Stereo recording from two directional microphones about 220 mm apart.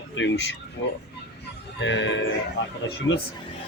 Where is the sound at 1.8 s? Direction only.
55° left (ahead or behind).